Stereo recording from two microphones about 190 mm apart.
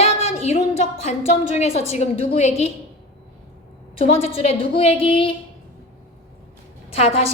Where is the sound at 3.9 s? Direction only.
30° left (ahead or behind).